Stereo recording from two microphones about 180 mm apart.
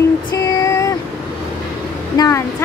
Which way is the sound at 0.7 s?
20° left (ahead or behind).